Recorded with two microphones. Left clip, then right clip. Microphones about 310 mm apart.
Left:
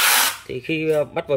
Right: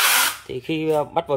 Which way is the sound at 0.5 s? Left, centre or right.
Centre.